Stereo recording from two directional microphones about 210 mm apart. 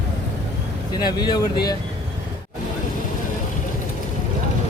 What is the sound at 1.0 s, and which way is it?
Speech, 20° left (ahead or behind).